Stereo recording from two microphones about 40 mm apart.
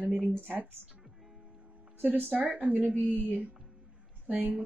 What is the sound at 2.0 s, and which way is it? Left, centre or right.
Speech, right.